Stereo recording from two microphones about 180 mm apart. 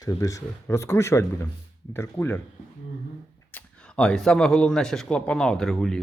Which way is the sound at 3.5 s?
5° left (ahead or behind).